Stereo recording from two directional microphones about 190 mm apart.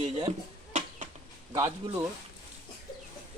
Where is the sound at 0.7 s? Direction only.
40° right (ahead or behind).